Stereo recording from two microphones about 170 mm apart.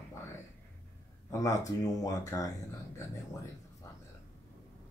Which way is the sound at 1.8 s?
20° left (ahead or behind).